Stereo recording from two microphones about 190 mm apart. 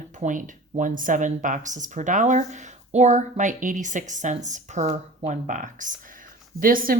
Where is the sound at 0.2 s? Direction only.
45° right (ahead or behind).